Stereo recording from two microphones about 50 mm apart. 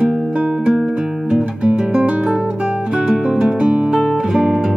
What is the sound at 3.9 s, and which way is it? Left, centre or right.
Music, centre.